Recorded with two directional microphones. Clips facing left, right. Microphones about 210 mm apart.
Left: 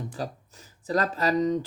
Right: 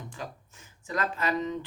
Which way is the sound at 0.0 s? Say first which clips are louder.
Left 6 dB; 35° left (ahead or behind).